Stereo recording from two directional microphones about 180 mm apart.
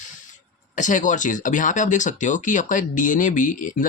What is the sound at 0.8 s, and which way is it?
Speech, 45° left (ahead or behind).